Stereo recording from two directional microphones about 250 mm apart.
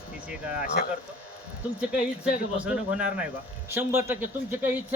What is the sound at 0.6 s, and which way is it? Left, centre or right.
Speech, left.